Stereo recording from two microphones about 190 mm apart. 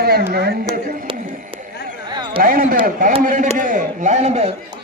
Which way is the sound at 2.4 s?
50° right (ahead or behind).